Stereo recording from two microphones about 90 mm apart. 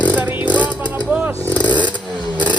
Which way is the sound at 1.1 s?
15° right (ahead or behind).